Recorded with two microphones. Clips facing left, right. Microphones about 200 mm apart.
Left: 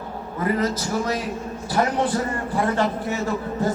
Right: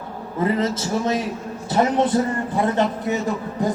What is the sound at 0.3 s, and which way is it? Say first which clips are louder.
A man's voice: right 2 dB; 25° right (ahead or behind).